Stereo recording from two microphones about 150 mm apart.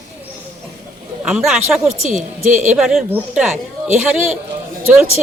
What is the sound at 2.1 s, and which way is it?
Speech, 55° right (ahead or behind).